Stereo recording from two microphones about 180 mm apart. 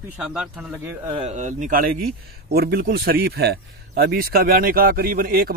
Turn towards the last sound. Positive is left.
turn(degrees=-55)  # may be behind; listen again after turning